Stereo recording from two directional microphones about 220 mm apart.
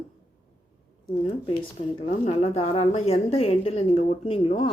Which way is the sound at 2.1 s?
30° left (ahead or behind).